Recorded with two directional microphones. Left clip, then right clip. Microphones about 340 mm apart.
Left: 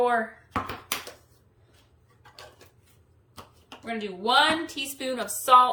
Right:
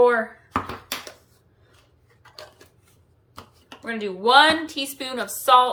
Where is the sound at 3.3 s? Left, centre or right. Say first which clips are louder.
Right 3 dB; centre.